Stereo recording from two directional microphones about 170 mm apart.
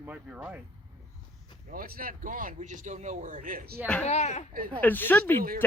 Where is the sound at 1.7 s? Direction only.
60° right (ahead or behind).